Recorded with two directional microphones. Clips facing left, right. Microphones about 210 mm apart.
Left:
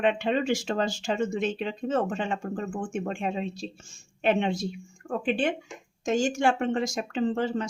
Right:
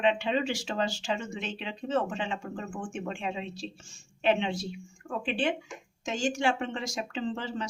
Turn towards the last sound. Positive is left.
turn(degrees=50)  # may be behind; listen again after turning